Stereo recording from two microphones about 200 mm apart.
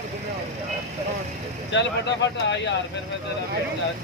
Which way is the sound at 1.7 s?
60° left (ahead or behind).